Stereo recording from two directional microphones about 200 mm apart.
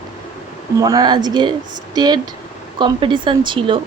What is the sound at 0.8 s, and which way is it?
Speech, 20° right (ahead or behind).